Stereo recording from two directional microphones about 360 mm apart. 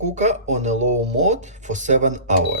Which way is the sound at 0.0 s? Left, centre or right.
Centre.